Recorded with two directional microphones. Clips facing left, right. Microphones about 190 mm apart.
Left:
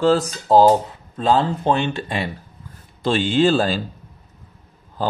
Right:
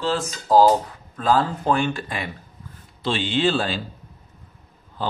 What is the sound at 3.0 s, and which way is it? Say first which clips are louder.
Speech: left 5 dB; 45° left (ahead or behind).